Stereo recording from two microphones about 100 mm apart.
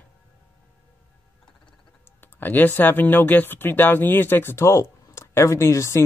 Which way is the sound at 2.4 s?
20° left (ahead or behind).